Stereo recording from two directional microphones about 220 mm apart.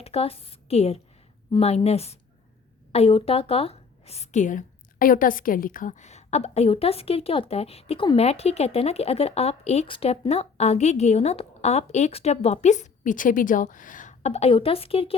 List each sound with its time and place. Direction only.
0.0 s a woman's voice: 25° left (ahead or behind)